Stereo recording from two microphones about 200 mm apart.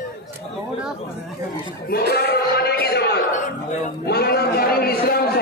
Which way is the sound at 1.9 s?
50° left (ahead or behind).